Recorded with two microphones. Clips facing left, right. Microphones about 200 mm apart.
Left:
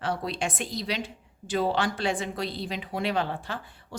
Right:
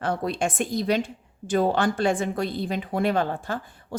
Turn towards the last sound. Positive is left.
turn(degrees=-45)  # may be behind; listen again after turning